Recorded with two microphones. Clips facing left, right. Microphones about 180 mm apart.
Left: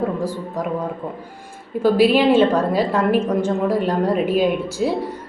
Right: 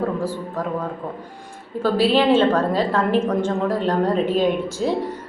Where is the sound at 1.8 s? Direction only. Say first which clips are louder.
Left 3 dB; 10° left (ahead or behind).